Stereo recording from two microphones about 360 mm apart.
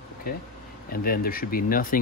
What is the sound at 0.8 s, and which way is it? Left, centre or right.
Speech, left.